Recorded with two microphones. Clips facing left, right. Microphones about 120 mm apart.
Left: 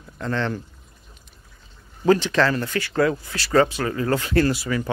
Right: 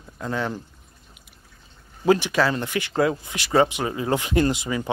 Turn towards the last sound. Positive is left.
turn(degrees=-20)  # may be behind; listen again after turning